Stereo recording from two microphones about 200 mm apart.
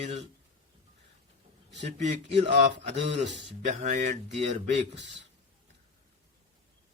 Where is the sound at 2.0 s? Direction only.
35° right (ahead or behind).